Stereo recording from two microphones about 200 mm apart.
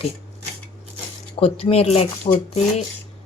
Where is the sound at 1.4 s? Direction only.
30° left (ahead or behind).